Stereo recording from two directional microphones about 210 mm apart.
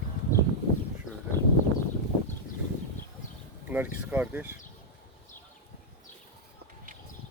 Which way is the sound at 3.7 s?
10° right (ahead or behind).